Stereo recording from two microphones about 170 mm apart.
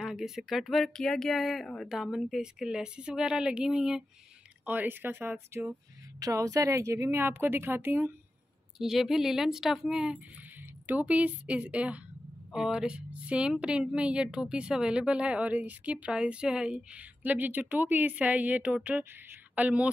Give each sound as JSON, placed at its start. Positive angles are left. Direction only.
{"t": 0.0, "sound": "speech", "side_deg": 0}
{"t": 8.7, "sound": "a woman's voice", "side_deg": 0}